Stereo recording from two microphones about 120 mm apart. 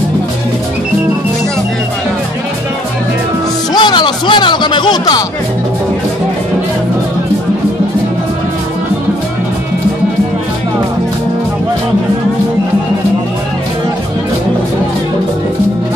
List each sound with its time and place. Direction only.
3.7 s music: 40° left (ahead or behind)